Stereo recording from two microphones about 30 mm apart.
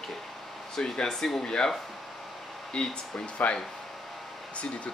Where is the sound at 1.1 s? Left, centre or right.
Centre.